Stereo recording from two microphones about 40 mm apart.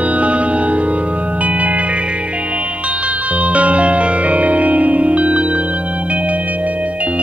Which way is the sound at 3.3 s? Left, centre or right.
Right.